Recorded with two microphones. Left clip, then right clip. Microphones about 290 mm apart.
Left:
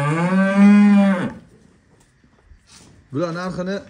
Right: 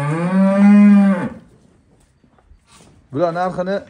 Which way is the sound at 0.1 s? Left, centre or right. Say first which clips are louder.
Right 5 dB; centre.